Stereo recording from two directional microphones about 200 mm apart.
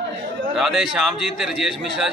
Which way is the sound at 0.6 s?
Centre (ahead or behind).